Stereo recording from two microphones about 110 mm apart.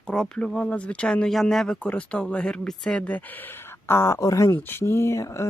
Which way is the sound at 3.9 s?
25° left (ahead or behind).